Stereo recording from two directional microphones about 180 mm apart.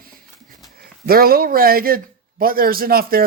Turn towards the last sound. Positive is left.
turn(degrees=-55)  # may be behind; listen again after turning